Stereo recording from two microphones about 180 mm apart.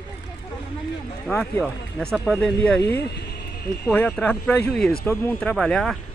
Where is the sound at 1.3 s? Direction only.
5° left (ahead or behind).